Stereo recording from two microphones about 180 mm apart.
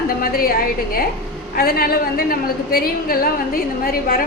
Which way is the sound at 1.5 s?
55° left (ahead or behind).